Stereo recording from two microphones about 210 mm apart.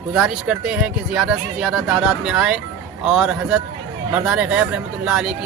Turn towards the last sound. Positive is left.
turn(degrees=-5)  # may be behind; listen again after turning